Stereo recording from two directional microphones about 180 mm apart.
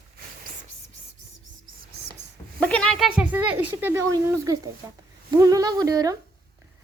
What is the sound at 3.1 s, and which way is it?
Speech, 10° right (ahead or behind).